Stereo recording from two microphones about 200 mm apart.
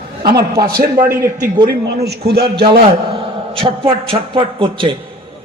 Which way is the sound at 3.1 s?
25° right (ahead or behind).